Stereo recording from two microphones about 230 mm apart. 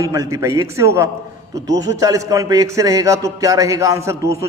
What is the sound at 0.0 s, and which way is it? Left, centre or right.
A man's voice, centre.